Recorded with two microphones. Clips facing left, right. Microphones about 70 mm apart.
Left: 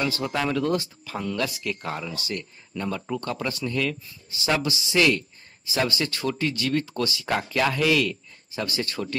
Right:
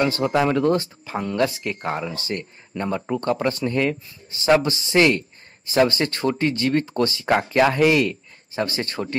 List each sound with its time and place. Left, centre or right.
0.0 s speech: right